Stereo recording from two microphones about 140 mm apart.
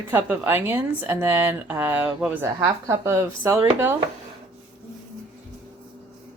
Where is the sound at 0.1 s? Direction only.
15° right (ahead or behind).